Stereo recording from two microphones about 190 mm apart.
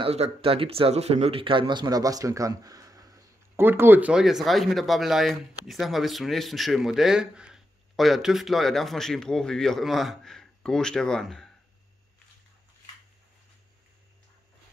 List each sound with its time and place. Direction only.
0.0 s speech: 30° right (ahead or behind); by 11.5 s centre (ahead or behind)